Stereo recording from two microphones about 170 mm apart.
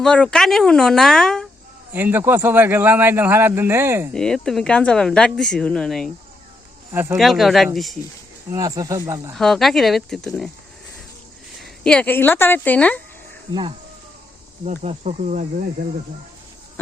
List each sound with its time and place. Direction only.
0.0 s speech: 5° left (ahead or behind)
1.9 s a man's voice: 10° right (ahead or behind)
4.1 s speech: 5° left (ahead or behind)
6.9 s a man's voice: 15° right (ahead or behind)
7.2 s speech: centre (ahead or behind)
8.4 s speech: 20° right (ahead or behind)
9.3 s speech: centre (ahead or behind)
11.6 s speech: 5° left (ahead or behind)
13.5 s speech: 25° right (ahead or behind)
14.7 s speech: 45° right (ahead or behind)